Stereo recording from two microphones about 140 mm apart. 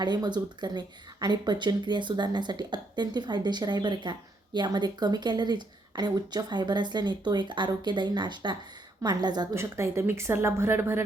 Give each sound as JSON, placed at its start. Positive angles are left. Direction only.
{"t": 0.0, "sound": "a woman's voice", "side_deg": -30}
{"t": 9.6, "sound": "a woman's voice", "side_deg": -20}